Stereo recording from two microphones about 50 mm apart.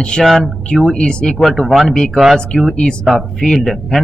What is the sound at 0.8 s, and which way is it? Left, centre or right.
Speech, centre.